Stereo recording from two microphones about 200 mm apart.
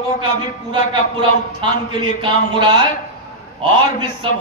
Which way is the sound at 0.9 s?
25° right (ahead or behind).